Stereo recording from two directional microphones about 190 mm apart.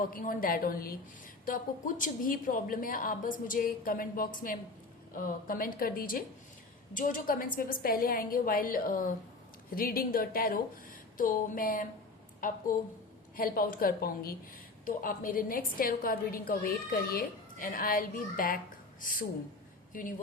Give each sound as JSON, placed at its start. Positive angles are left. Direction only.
{"t": 0.0, "sound": "a woman's voice", "side_deg": 45}
{"t": 2.0, "sound": "a woman's voice", "side_deg": 45}
{"t": 19.9, "sound": "speech", "side_deg": 45}